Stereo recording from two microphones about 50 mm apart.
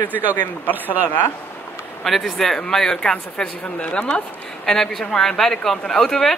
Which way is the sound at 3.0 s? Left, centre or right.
Centre.